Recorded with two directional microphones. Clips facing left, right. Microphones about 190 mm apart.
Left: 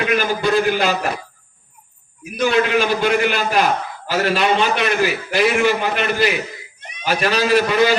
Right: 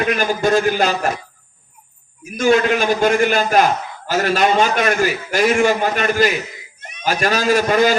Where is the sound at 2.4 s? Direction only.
45° right (ahead or behind).